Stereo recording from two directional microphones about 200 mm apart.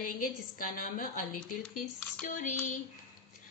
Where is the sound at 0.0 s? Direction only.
45° left (ahead or behind).